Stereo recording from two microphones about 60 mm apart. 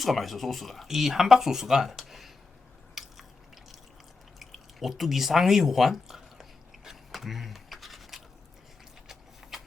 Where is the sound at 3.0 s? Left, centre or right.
Centre.